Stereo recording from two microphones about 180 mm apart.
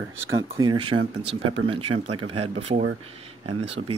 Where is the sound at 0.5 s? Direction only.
25° right (ahead or behind).